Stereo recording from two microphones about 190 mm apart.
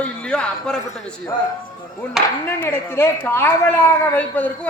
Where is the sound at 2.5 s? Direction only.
10° left (ahead or behind).